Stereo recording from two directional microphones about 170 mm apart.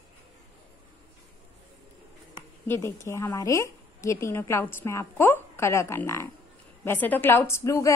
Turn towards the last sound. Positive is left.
turn(degrees=20)  # may be behind; listen again after turning